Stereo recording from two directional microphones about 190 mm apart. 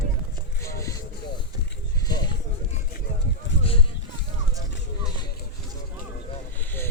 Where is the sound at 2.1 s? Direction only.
20° left (ahead or behind).